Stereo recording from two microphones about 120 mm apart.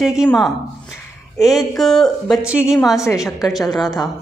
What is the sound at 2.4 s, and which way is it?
Speech, 10° right (ahead or behind).